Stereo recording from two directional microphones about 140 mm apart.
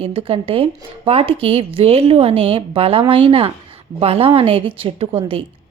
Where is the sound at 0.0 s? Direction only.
45° right (ahead or behind).